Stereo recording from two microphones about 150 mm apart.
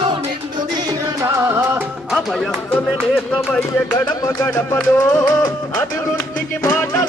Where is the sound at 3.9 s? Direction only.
20° left (ahead or behind).